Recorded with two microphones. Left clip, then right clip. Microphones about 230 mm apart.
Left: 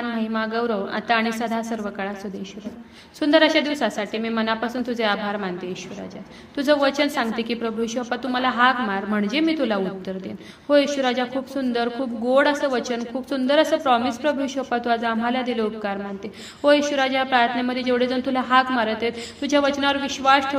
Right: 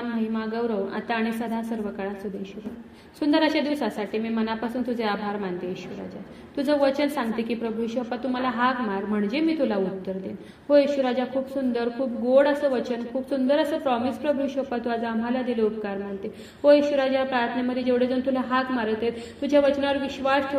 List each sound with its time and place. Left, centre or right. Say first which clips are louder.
0.1 s a man's voice: left 4 dB; left
3.2 s a man's voice: left 5 dB; left